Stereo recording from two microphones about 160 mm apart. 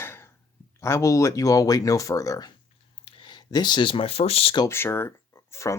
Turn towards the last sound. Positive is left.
turn(degrees=20)  # may be behind; listen again after turning